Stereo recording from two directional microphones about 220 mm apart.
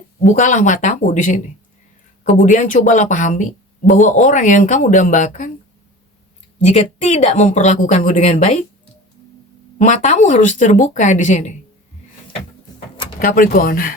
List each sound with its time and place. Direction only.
0.3 s a woman's voice: 35° left (ahead or behind)
6.7 s a woman's voice: 30° left (ahead or behind)
9.7 s a woman's voice: 35° left (ahead or behind)
13.1 s a woman's voice: 40° left (ahead or behind)